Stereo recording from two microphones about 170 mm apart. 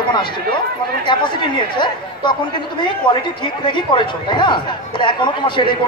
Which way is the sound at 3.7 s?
25° left (ahead or behind).